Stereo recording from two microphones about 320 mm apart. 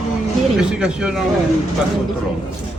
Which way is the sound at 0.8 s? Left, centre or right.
Centre.